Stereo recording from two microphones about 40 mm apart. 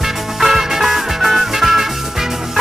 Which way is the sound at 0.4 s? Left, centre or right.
Centre.